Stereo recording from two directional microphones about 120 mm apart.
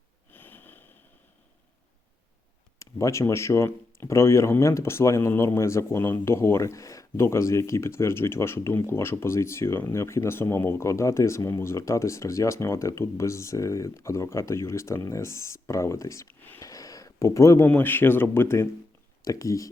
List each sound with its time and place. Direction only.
0.3 s sniff: 15° left (ahead or behind)
2.7 s speech: 25° left (ahead or behind)
16.6 s a sound: 30° left (ahead or behind)
17.7 s speech: 15° left (ahead or behind)